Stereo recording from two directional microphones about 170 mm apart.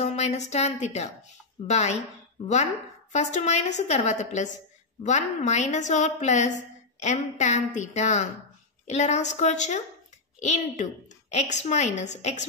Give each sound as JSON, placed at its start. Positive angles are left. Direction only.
{"t": 0.0, "sound": "a woman's voice", "side_deg": 40}